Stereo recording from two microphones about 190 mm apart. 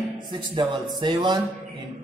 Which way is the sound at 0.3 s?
25° right (ahead or behind).